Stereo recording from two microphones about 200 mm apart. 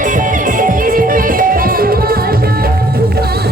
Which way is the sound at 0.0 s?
40° right (ahead or behind).